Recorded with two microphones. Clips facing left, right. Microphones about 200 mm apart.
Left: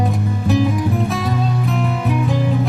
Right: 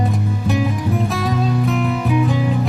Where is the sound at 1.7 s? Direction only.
Centre (ahead or behind).